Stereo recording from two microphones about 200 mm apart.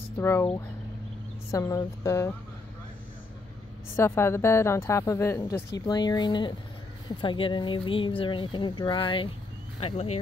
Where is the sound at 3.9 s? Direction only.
10° left (ahead or behind).